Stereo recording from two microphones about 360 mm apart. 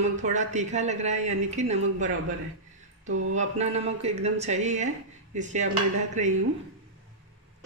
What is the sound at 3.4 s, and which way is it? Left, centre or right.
Speech, centre.